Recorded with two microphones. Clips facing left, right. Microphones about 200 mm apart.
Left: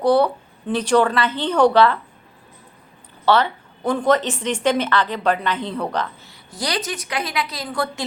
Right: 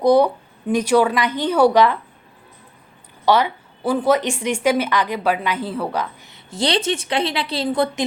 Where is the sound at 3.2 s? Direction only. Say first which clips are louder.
Right 1 dB; 10° right (ahead or behind).